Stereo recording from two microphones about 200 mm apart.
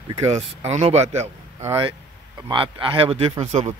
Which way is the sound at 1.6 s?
15° right (ahead or behind).